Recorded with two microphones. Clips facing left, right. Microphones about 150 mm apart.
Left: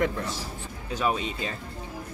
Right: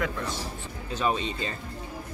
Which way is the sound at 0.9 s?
5° left (ahead or behind).